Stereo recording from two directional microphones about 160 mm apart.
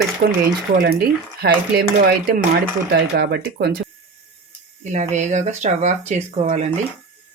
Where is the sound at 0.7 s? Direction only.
75° right (ahead or behind).